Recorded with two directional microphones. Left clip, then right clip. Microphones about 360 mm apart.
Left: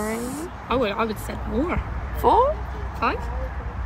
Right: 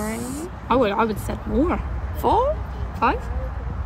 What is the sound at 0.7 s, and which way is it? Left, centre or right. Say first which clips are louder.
Speech: right 4 dB; right.